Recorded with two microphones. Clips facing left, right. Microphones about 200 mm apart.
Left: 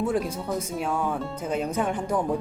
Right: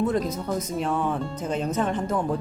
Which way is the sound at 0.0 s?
10° left (ahead or behind).